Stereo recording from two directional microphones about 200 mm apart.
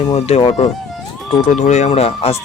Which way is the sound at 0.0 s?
30° left (ahead or behind).